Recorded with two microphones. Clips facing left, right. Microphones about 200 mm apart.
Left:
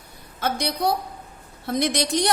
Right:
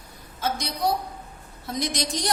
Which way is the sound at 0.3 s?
60° left (ahead or behind).